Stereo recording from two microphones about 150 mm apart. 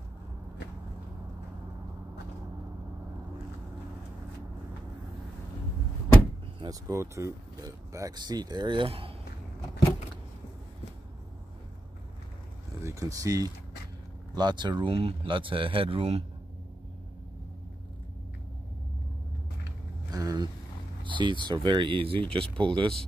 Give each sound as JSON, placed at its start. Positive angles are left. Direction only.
{"t": 6.6, "sound": "speech", "side_deg": -20}
{"t": 12.8, "sound": "speech", "side_deg": -20}
{"t": 20.1, "sound": "vehicle", "side_deg": -25}
{"t": 21.0, "sound": "speech", "side_deg": -30}